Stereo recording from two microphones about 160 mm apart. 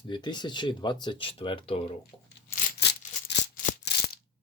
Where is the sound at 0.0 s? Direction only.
30° left (ahead or behind).